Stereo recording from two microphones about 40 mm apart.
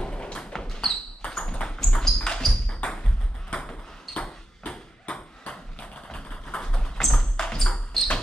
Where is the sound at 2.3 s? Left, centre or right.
Centre.